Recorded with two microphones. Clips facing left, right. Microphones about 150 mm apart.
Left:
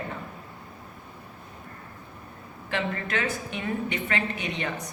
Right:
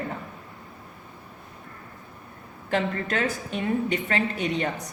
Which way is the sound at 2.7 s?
40° right (ahead or behind).